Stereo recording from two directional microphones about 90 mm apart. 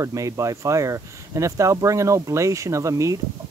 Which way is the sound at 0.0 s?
35° right (ahead or behind).